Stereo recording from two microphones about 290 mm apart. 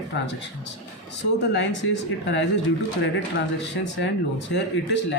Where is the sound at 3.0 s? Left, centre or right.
Left.